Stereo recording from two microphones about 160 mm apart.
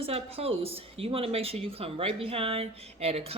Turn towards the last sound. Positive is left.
turn(degrees=-40)  # may be behind; listen again after turning